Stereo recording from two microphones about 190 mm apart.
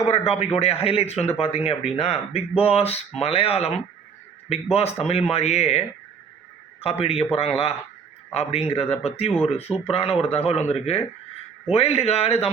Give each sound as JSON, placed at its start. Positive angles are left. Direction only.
{"t": 0.0, "sound": "speech", "side_deg": 35}
{"t": 6.8, "sound": "speech", "side_deg": 30}